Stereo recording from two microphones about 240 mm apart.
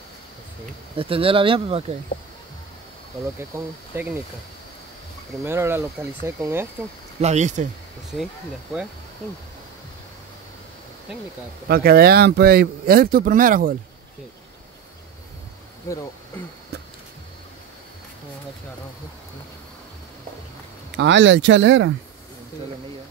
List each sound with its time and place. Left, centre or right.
0.9 s speech: right
3.3 s speech: centre
5.4 s speech: centre
7.2 s speech: right
11.6 s speech: right
20.9 s speech: right